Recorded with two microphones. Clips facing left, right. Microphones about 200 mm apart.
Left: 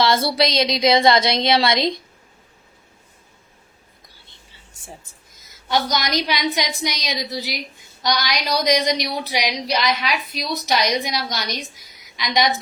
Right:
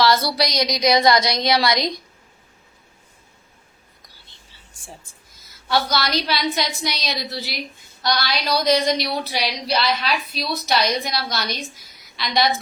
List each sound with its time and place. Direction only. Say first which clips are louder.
0.0 s a woman's voice: left 1 dB; 25° left (ahead or behind)
5.6 s a woman's voice: even; 20° left (ahead or behind)